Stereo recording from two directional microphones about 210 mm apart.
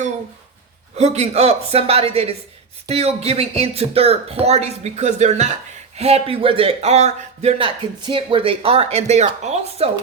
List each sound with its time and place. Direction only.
0.9 s speech: 30° right (ahead or behind)